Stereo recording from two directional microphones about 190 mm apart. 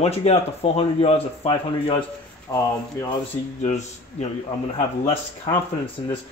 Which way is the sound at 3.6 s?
35° left (ahead or behind).